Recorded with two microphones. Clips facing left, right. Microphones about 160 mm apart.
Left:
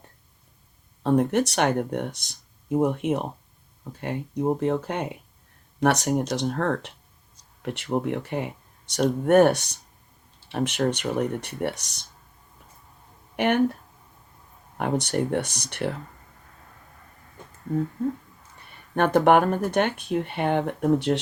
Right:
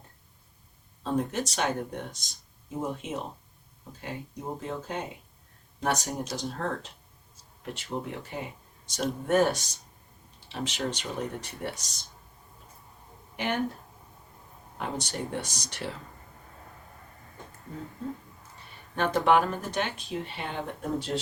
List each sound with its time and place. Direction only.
1.0 s speech: 60° left (ahead or behind)
13.3 s speech: 65° left (ahead or behind)
14.8 s speech: 60° left (ahead or behind)
18.9 s speech: 55° left (ahead or behind)